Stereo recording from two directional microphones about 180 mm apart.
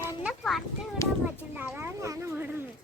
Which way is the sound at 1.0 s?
15° left (ahead or behind).